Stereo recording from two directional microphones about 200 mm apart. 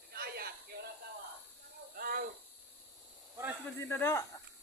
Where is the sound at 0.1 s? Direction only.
50° right (ahead or behind).